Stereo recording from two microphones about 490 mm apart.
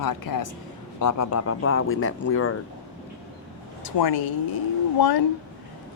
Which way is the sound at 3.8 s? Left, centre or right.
Left.